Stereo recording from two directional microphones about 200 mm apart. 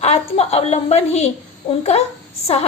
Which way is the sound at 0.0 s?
30° left (ahead or behind).